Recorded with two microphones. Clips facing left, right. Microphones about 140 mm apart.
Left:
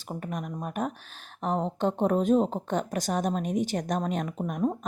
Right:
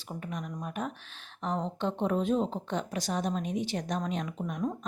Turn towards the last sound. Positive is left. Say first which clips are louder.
# left 4 dB
turn(degrees=50)  # may be behind; listen again after turning